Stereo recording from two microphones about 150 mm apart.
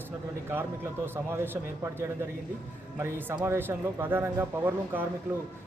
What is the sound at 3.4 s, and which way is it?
Speech, 15° right (ahead or behind).